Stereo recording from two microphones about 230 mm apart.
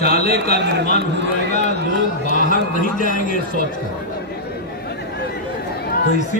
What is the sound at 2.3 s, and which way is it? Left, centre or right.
Speech, left.